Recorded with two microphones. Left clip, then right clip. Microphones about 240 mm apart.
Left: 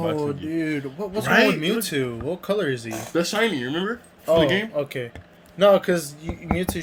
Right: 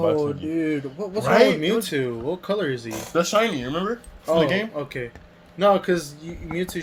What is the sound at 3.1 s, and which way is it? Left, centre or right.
Speech, centre.